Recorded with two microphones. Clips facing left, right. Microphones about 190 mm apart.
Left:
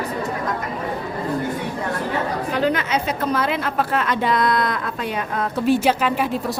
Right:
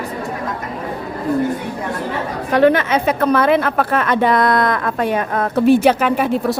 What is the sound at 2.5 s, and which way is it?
A woman's voice, 65° right (ahead or behind).